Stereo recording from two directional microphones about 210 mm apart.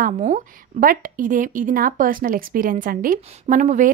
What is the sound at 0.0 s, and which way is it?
A woman's voice, 35° right (ahead or behind).